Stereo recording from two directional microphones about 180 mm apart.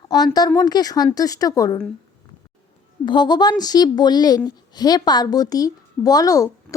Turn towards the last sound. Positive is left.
turn(degrees=20)  # may be behind; listen again after turning